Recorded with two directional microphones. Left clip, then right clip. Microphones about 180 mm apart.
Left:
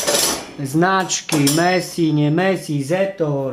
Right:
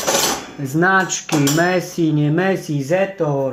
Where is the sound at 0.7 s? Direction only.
10° left (ahead or behind).